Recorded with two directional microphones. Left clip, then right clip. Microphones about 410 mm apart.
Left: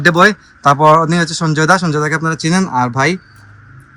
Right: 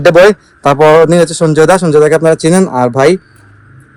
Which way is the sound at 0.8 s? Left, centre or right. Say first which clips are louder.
Right 5 dB; right.